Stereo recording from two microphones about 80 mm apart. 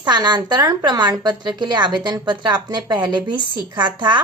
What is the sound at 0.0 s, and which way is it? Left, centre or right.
A woman's voice, right.